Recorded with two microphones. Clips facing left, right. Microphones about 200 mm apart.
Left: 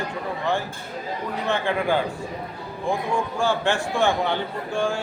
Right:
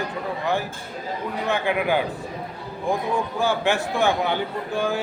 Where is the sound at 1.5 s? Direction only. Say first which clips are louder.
Even; 15° right (ahead or behind).